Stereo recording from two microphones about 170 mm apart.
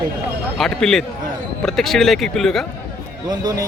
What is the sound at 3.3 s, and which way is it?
Speech, 20° right (ahead or behind).